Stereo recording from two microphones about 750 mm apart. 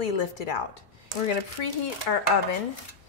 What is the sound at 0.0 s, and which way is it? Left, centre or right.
Speech, left.